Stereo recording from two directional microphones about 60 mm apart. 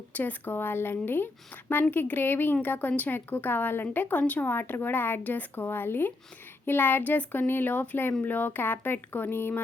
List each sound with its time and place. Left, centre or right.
0.1 s speech: left